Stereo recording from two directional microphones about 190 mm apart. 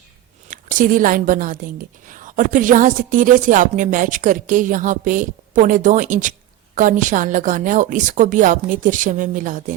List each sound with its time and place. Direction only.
0.5 s a woman's voice: 45° right (ahead or behind)